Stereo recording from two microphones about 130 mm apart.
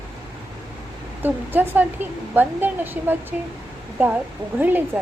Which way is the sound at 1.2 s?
15° right (ahead or behind).